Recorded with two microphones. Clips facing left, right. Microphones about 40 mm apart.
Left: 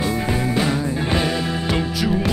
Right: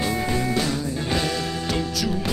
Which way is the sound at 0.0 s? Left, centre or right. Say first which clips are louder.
Left 2 dB; left.